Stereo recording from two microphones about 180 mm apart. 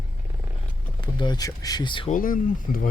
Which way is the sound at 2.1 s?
50° left (ahead or behind).